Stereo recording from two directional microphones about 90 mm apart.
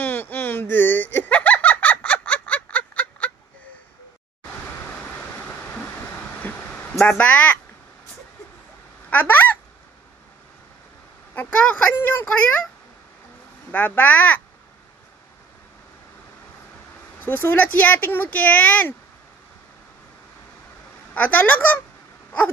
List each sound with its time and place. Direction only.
0.0 s giggle: 20° left (ahead or behind)
6.4 s a sound: 20° left (ahead or behind)
9.1 s speech: 20° left (ahead or behind)
11.3 s a sound: 15° left (ahead or behind)
13.7 s speech: 20° left (ahead or behind)
17.2 s speech: 25° left (ahead or behind)
21.1 s speech: 20° left (ahead or behind)